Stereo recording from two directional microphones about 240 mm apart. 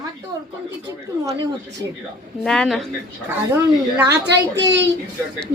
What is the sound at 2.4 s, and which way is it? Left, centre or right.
Speech, centre.